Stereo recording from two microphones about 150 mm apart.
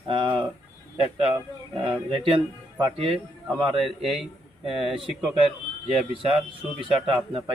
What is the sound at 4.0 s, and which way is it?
Speech, centre (ahead or behind).